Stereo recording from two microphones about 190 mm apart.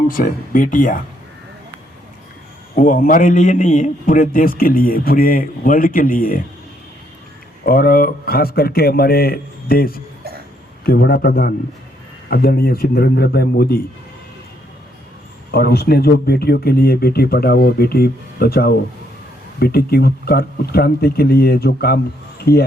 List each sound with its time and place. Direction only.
0.1 s a man's voice: 45° left (ahead or behind)
2.7 s a man's voice: 45° left (ahead or behind)
7.6 s a man's voice: 50° left (ahead or behind)
15.5 s speech: 55° left (ahead or behind)